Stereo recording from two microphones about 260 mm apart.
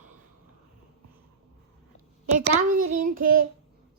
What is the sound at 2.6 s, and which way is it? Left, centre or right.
Speech, right.